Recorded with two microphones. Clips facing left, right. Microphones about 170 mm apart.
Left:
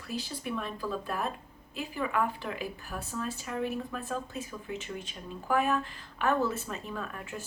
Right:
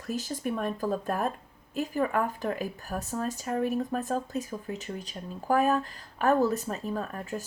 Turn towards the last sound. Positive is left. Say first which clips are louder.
# right 5 dB
turn(degrees=-40)  # may be behind; listen again after turning